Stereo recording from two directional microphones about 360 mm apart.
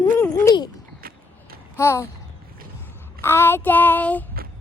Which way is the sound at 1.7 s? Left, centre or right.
Centre.